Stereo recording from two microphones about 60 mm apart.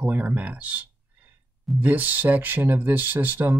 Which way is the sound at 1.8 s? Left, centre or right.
Right.